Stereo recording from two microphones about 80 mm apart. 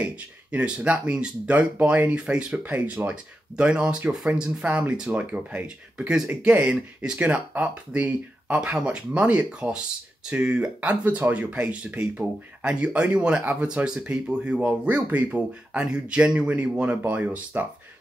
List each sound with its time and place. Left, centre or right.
0.0 s speech: centre